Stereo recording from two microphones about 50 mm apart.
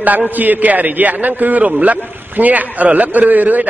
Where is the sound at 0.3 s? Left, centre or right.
Right.